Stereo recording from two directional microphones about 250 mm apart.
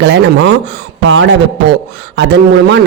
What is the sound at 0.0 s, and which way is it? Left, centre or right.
A man's voice, right.